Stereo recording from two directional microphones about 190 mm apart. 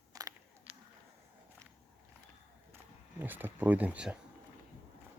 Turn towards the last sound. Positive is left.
turn(degrees=-5)  # may be behind; listen again after turning